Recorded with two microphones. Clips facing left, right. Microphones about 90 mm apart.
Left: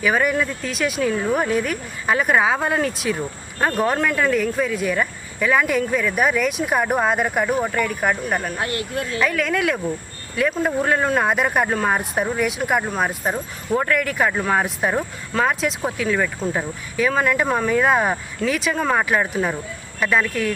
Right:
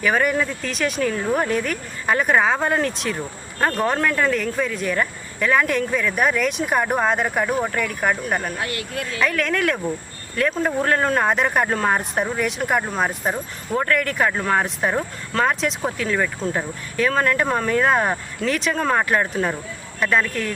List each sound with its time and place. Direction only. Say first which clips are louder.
0.0 s speech: even; centre (ahead or behind)
8.5 s speech: left 2 dB; 30° left (ahead or behind)
9.2 s speech: even; 5° left (ahead or behind)